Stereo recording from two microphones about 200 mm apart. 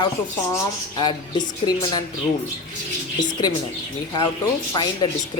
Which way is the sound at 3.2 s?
20° left (ahead or behind).